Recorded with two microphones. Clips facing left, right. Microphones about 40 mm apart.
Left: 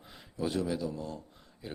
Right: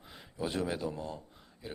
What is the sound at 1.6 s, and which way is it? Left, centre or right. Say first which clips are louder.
Speech: left 1 dB; centre.